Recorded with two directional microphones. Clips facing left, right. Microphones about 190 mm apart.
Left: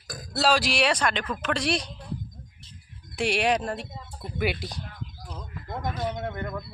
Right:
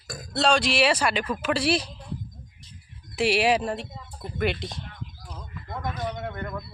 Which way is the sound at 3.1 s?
5° right (ahead or behind).